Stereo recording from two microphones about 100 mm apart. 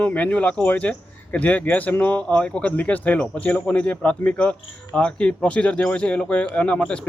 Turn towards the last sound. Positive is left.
turn(degrees=10)  # may be behind; listen again after turning